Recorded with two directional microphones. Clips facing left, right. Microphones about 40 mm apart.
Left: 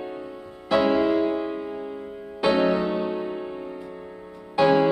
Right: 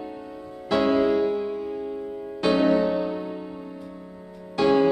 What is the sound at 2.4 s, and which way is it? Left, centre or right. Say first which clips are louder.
Music: right 1 dB; centre.